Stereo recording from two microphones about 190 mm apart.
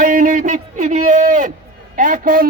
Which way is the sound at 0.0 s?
45° right (ahead or behind).